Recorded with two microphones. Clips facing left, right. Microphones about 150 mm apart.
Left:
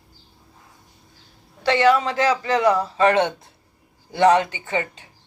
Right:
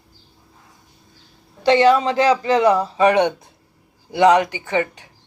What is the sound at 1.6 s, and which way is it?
A woman's voice, 20° right (ahead or behind).